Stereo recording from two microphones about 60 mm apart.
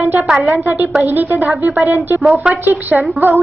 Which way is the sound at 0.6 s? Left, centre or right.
Right.